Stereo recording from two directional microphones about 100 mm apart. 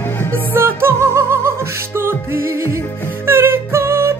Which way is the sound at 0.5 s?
25° right (ahead or behind).